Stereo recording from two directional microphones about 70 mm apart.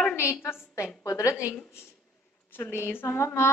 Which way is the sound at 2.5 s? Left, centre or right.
Left.